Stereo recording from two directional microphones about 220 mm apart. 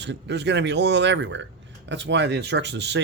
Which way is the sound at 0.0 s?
50° right (ahead or behind).